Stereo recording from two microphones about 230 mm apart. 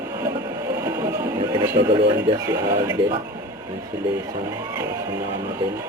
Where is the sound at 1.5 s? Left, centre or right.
Centre.